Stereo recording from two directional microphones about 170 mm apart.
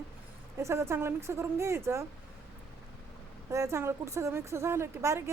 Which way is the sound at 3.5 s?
15° right (ahead or behind).